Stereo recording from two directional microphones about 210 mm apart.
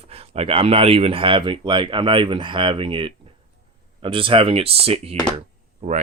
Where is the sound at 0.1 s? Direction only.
30° right (ahead or behind).